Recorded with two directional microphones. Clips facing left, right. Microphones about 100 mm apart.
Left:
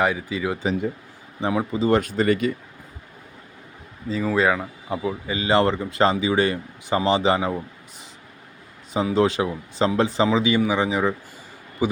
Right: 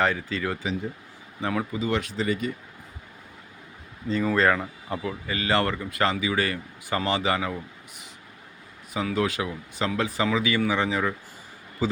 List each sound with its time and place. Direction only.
0.0 s speech: 10° left (ahead or behind)
1.8 s speech: 45° left (ahead or behind); by 2.5 s 65° left (ahead or behind)
4.1 s speech: 5° left (ahead or behind)
5.0 s speech: 20° left (ahead or behind)